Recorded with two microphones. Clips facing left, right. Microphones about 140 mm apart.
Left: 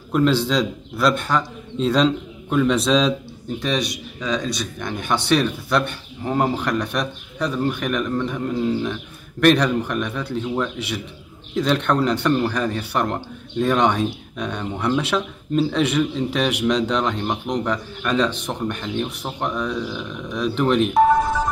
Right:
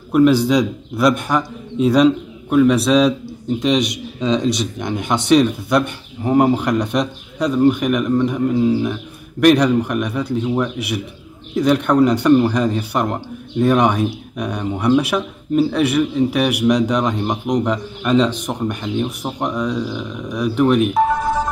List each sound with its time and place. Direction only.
0.1 s speech: 10° right (ahead or behind)